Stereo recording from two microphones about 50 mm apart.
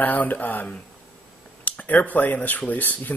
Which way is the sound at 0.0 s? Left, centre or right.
Left.